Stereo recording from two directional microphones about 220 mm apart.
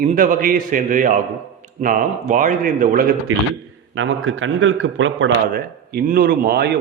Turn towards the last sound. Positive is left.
turn(degrees=-45)  # may be behind; listen again after turning